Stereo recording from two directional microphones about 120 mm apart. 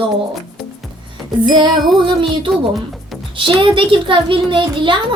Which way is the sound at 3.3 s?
45° right (ahead or behind).